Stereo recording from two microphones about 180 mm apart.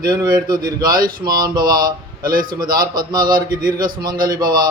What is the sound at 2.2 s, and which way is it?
Speech, 50° right (ahead or behind).